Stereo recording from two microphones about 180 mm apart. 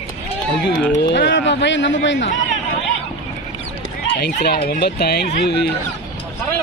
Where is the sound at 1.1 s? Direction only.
80° left.